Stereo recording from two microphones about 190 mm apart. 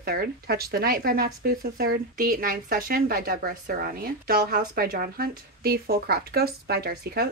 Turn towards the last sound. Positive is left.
turn(degrees=-55)  # may be behind; listen again after turning